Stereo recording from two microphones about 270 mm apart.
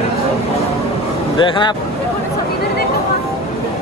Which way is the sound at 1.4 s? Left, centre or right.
Centre.